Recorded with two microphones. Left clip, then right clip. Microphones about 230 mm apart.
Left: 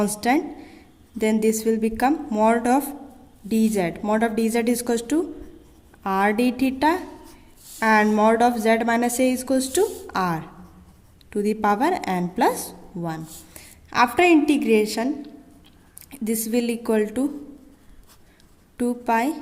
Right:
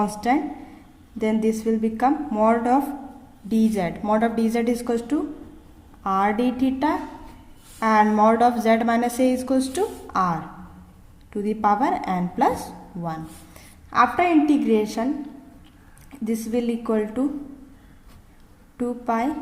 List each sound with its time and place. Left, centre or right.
0.0 s a woman's voice: left
16.2 s a woman's voice: left
18.8 s a woman's voice: left